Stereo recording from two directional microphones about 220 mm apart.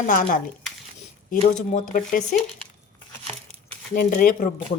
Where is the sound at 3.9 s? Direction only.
40° left (ahead or behind).